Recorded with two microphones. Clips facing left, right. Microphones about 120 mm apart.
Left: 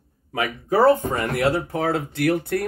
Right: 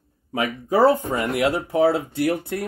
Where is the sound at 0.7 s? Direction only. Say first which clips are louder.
Left 1 dB; 15° right (ahead or behind).